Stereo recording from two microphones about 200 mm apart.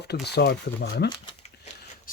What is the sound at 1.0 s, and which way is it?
Crumpling, 30° left (ahead or behind).